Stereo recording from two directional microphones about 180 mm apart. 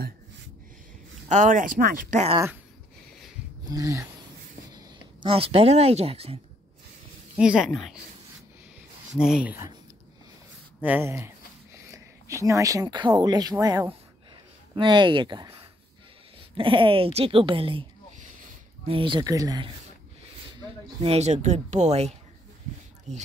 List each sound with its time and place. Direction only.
1.3 s speech: 45° right (ahead or behind)
3.6 s speech: 20° right (ahead or behind)
5.2 s speech: 30° right (ahead or behind)
7.3 s speech: 5° right (ahead or behind)
9.1 s speech: 5° right (ahead or behind)
10.8 s speech: 10° right (ahead or behind); by 17.8 s 30° right (ahead or behind)
18.9 s speech: 30° right (ahead or behind)
21.0 s speech: 35° right (ahead or behind)